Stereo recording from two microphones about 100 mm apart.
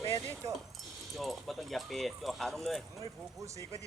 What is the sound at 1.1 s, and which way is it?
Speech, centre (ahead or behind).